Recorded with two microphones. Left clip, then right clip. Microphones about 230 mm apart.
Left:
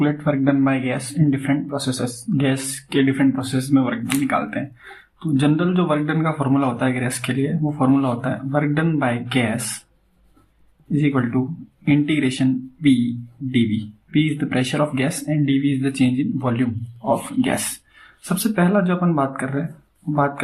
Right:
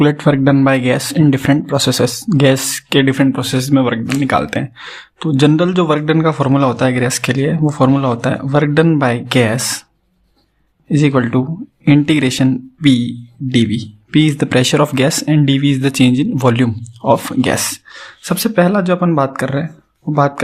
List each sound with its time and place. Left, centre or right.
0.0 s speech: right
11.0 s speech: right